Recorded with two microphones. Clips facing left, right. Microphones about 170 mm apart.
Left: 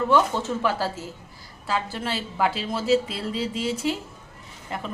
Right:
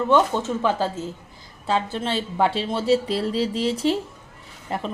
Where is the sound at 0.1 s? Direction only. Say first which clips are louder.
Right 4 dB; 20° right (ahead or behind).